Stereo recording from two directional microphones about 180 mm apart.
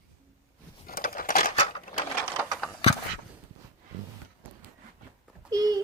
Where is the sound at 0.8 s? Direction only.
50° left (ahead or behind).